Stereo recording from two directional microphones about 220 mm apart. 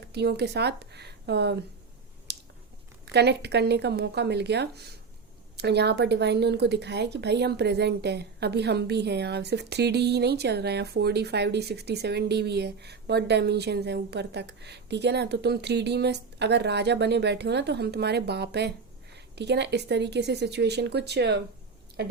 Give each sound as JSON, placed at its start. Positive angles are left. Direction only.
{"t": 0.1, "sound": "a woman's voice", "side_deg": -50}
{"t": 2.3, "sound": "a sound", "side_deg": -50}
{"t": 3.1, "sound": "a woman's voice", "side_deg": -50}